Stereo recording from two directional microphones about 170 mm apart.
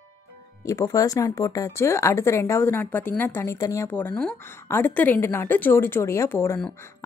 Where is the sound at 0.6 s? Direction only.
20° left (ahead or behind).